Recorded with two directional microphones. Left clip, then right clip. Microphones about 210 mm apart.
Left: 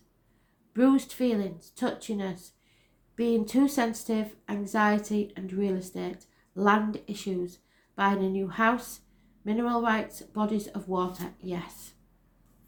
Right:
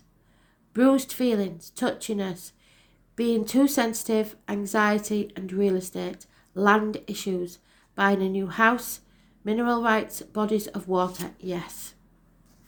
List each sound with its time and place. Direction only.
0.7 s speech: 45° right (ahead or behind)